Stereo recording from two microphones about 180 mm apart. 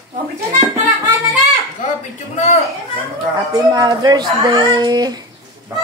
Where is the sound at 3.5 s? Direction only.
20° right (ahead or behind).